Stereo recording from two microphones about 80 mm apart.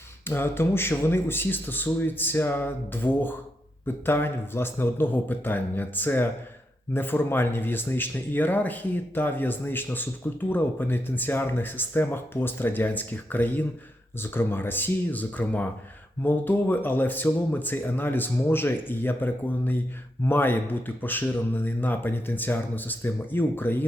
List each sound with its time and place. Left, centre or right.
0.3 s speech: left